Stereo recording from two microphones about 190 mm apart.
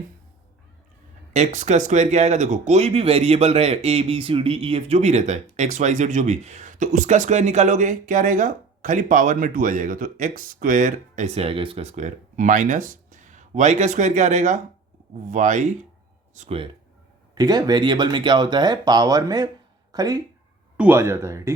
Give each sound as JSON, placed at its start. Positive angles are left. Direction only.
{"t": 1.3, "sound": "speech", "side_deg": -40}
{"t": 17.3, "sound": "speech", "side_deg": -20}